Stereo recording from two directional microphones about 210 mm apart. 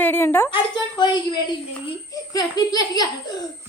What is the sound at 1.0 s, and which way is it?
A woman's voice, 20° left (ahead or behind).